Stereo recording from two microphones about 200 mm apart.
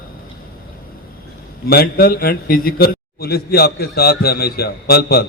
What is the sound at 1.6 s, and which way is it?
A man's voice, 50° left (ahead or behind).